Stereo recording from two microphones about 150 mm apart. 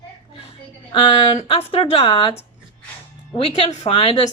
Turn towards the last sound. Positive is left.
turn(degrees=40)  # may be behind; listen again after turning